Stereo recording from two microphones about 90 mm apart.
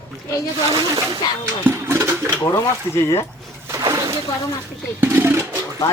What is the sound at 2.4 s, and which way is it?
Speech, 35° left (ahead or behind).